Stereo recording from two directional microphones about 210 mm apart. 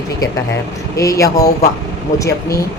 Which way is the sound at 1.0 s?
15° left (ahead or behind).